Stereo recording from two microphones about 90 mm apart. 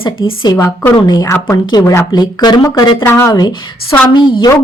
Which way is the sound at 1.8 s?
30° left (ahead or behind).